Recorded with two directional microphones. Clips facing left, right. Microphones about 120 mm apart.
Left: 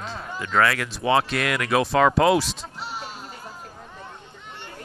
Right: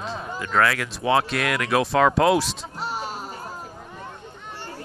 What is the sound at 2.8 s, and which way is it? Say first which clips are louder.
Music: right 6 dB; 45° right (ahead or behind).